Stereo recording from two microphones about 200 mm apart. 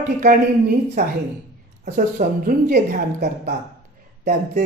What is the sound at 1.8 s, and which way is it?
Speech, 45° right (ahead or behind).